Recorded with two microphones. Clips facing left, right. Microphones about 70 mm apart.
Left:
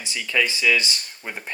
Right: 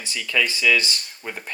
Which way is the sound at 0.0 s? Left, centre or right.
Centre.